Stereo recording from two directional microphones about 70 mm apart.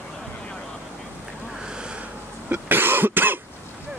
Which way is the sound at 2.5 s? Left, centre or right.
Right.